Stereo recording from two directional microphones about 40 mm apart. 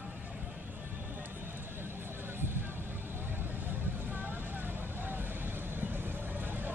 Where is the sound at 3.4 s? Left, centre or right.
Right.